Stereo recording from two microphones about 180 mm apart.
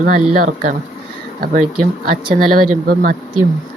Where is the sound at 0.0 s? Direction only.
50° right (ahead or behind).